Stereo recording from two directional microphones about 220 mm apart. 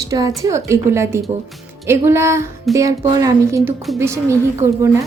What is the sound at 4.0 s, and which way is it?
Speech, 10° right (ahead or behind).